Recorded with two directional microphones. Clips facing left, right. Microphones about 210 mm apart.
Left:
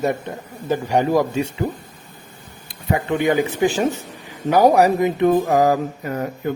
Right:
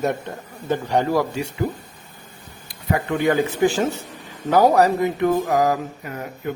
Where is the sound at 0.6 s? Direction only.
10° left (ahead or behind).